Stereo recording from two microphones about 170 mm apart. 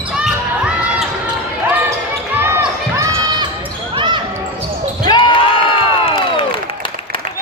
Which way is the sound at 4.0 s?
25° right (ahead or behind).